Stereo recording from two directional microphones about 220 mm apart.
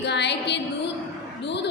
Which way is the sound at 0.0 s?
50° left (ahead or behind).